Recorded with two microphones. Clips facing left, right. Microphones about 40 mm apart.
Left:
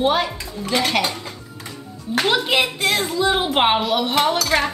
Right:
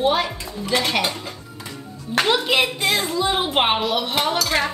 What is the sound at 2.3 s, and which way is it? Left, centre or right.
Speech, centre.